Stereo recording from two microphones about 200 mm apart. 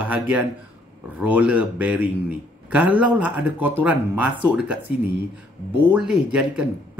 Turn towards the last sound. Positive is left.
turn(degrees=-5)  # may be behind; listen again after turning